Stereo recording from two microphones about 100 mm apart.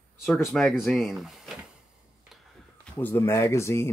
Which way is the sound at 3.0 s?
20° left (ahead or behind).